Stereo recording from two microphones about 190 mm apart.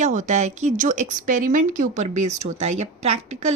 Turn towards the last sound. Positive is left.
turn(degrees=-35)  # may be behind; listen again after turning